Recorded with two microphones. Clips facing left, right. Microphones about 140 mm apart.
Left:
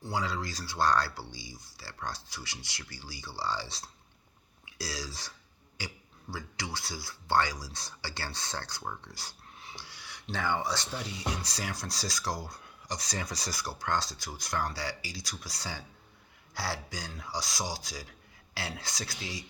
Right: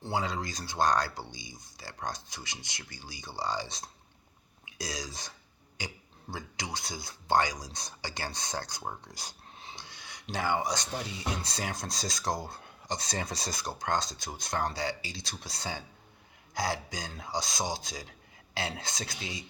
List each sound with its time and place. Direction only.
0.0 s speech: 20° right (ahead or behind)
8.8 s speech: 35° right (ahead or behind)
9.1 s dog: 20° right (ahead or behind)
11.4 s speech: 25° right (ahead or behind)